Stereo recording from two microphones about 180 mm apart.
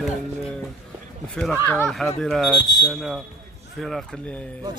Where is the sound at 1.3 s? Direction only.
5° left (ahead or behind).